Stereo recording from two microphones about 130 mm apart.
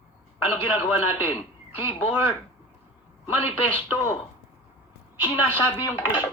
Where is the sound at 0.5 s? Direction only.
15° right (ahead or behind).